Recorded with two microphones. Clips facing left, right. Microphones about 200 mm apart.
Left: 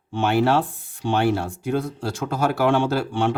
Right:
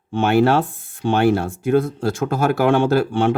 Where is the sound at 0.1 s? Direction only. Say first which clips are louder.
Right 4 dB; 50° right (ahead or behind).